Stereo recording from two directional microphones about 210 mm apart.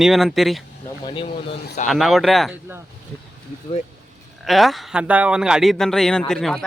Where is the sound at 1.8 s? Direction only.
Centre (ahead or behind).